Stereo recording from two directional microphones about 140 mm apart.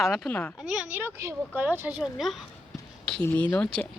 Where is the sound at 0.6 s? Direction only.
Centre (ahead or behind).